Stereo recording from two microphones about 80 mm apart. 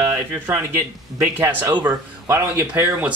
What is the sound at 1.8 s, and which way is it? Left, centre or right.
Speech, right.